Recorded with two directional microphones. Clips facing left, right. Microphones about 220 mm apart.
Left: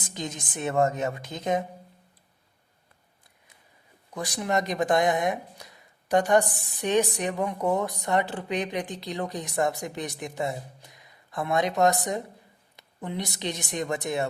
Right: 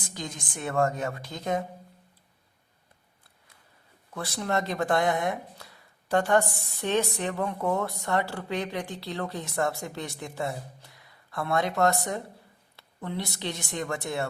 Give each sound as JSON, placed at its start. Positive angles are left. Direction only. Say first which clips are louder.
{"t": 0.0, "sound": "a woman's voice", "louder": "left 3 dB", "side_deg": 20}
{"t": 4.1, "sound": "a woman's voice", "louder": "left 2 dB", "side_deg": 15}